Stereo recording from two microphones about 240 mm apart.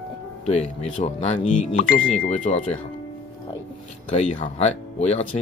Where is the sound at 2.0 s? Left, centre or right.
Centre.